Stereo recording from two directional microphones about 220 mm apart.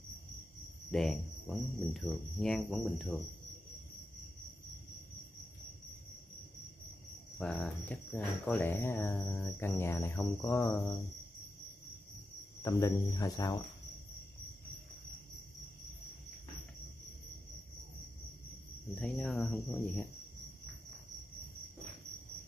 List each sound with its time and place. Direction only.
0.9 s cricket: centre (ahead or behind)
7.3 s cricket: 5° left (ahead or behind)
12.6 s cricket: 15° left (ahead or behind)
18.9 s cricket: 5° left (ahead or behind)